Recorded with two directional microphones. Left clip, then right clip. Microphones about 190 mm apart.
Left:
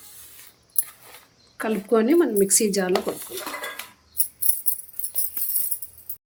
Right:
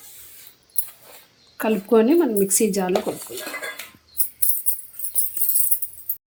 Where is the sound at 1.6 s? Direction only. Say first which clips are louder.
Right 4 dB; 35° right (ahead or behind).